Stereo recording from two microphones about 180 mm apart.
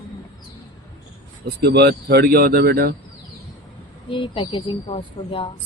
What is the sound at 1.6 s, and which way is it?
Speech, 65° right (ahead or behind).